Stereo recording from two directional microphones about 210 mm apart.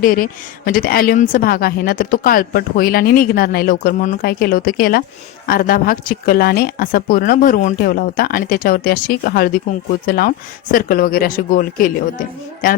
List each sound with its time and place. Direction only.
0.0 s a woman's voice: 40° left (ahead or behind)